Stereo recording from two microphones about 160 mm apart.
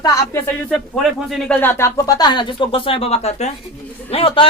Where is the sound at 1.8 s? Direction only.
25° left (ahead or behind).